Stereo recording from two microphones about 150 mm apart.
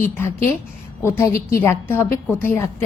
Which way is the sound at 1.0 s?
15° left (ahead or behind).